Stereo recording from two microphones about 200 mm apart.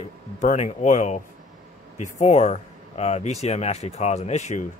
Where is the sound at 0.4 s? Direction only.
35° left (ahead or behind).